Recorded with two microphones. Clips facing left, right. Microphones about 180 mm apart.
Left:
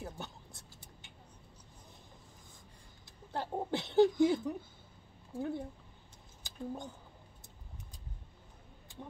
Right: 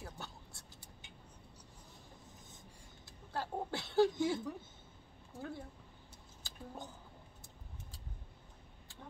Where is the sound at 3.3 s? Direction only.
20° left (ahead or behind).